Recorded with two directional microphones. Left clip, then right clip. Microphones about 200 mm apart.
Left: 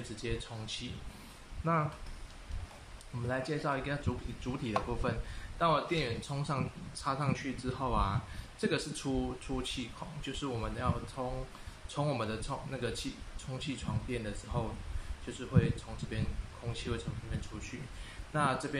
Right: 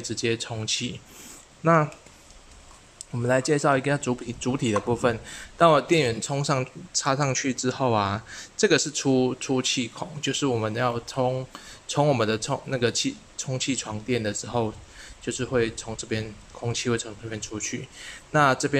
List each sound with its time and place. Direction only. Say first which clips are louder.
0.1 s speech: right 14 dB; 50° right (ahead or behind)
3.3 s speech: right 13 dB; 60° right (ahead or behind)